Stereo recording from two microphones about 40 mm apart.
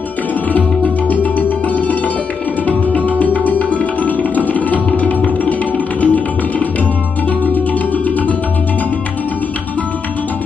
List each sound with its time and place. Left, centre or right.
0.5 s music: left
3.2 s tabla: left